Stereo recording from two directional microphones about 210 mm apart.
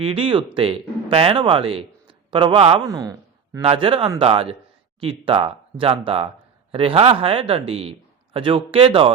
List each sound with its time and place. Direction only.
0.0 s a man's voice: 25° right (ahead or behind)